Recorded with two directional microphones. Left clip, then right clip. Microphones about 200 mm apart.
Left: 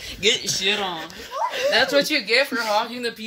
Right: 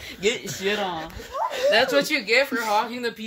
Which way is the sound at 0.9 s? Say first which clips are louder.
Left 1 dB; 5° left (ahead or behind).